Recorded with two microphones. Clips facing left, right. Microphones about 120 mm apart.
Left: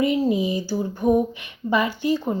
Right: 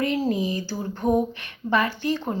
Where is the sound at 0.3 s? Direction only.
15° left (ahead or behind).